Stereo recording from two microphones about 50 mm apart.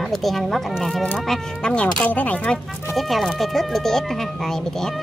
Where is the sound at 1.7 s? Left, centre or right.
Left.